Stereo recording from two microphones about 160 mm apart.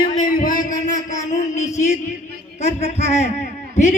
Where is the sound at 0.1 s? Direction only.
55° left (ahead or behind).